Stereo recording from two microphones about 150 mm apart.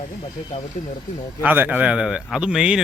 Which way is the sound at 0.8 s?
55° left (ahead or behind).